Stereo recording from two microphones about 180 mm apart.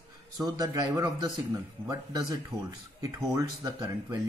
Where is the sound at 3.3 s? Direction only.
20° right (ahead or behind).